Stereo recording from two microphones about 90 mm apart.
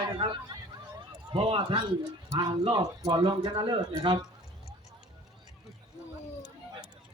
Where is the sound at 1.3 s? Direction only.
80° right.